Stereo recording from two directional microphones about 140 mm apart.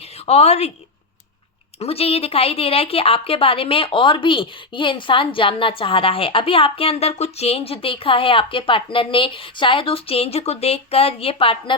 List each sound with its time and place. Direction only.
0.3 s a woman's voice: 50° left (ahead or behind)
1.8 s a woman's voice: 45° left (ahead or behind)